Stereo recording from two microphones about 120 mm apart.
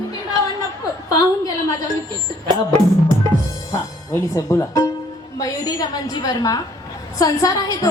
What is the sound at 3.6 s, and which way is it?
Music, 25° left (ahead or behind).